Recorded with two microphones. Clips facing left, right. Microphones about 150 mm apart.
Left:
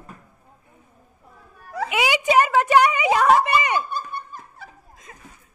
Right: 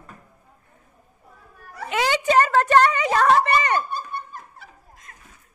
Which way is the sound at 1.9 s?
10° left (ahead or behind).